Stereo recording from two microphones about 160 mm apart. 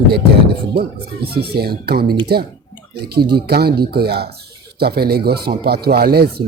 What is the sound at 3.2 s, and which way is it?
Speech, 80° right.